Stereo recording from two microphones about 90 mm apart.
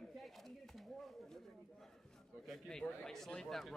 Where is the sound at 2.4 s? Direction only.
5° left (ahead or behind).